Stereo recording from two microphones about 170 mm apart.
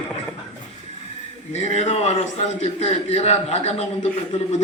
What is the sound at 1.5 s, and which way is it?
A man's voice, 40° left (ahead or behind).